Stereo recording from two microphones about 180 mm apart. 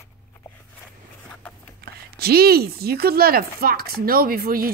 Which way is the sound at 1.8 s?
60° right (ahead or behind).